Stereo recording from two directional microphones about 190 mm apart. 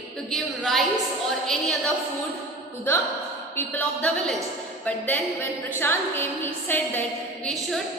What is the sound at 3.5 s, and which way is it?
A woman's voice, 10° left (ahead or behind).